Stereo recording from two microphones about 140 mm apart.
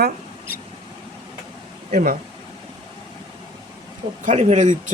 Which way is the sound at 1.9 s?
90° right.